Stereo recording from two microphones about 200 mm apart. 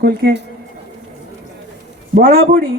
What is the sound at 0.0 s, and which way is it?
Speech, 55° right (ahead or behind).